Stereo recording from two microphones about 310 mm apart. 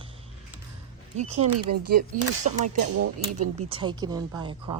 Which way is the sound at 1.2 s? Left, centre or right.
Right.